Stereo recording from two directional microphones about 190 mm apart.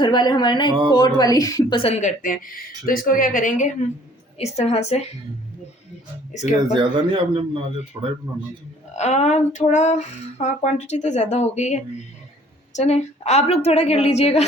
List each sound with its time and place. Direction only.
0.0 s speech: 25° left (ahead or behind)
1.8 s speech: 35° left (ahead or behind)
6.7 s a man's voice: 25° right (ahead or behind)
9.0 s speech: 35° left (ahead or behind)